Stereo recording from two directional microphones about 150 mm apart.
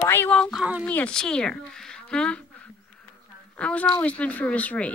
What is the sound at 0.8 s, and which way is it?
Speech, 10° left (ahead or behind).